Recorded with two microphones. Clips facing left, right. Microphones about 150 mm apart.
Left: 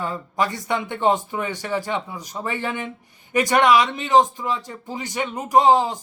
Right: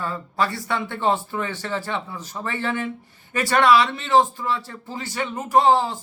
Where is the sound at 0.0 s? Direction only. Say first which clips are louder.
Left 1 dB; 15° left (ahead or behind).